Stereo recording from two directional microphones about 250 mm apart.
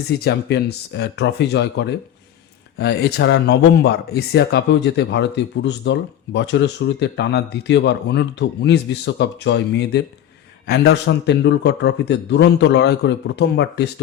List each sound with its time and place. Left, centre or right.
0.3 s speech: left